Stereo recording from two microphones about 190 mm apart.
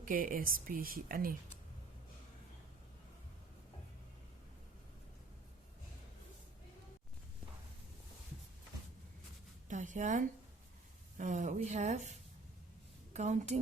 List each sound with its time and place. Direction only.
0.0 s speech: 45° right (ahead or behind)
9.6 s a sound: 40° right (ahead or behind)
11.2 s a woman's voice: 40° right (ahead or behind)
13.1 s a woman's voice: 35° right (ahead or behind)